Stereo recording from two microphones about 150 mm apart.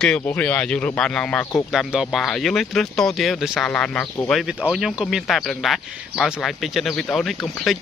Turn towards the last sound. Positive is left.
turn(degrees=0)  # may be behind; listen again after turning